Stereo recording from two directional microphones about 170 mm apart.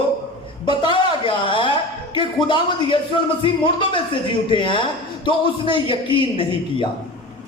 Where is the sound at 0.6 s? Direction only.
30° left (ahead or behind).